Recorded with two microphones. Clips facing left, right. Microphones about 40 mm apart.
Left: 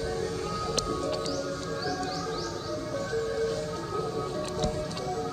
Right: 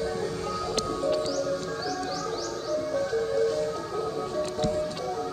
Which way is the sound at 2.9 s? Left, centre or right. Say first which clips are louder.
Right 3 dB; centre.